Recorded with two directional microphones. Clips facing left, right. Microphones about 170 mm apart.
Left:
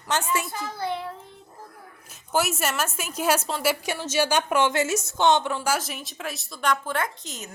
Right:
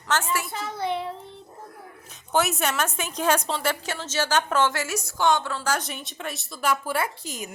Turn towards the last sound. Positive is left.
turn(degrees=-10)  # may be behind; listen again after turning